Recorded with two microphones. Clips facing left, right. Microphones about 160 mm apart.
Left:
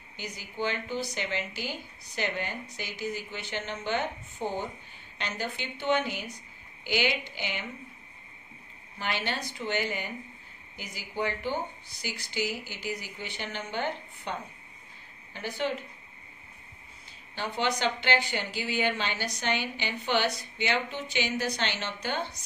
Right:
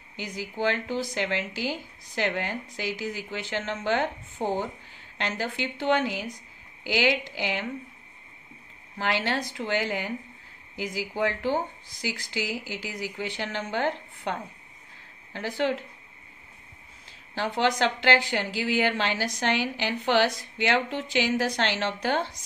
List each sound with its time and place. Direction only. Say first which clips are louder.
0.2 s a woman's voice: right 5 dB; 90° right
4.4 s speech: right 5 dB; 30° right (ahead or behind)
5.1 s a woman's voice: right 4 dB; 90° right
8.9 s a woman's voice: right 5 dB; 90° right
15.3 s a woman's voice: right 4 dB; 90° right
17.4 s a woman's voice: right 5 dB; 90° right